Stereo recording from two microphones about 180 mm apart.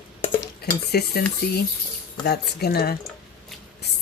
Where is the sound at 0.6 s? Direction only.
60° left (ahead or behind).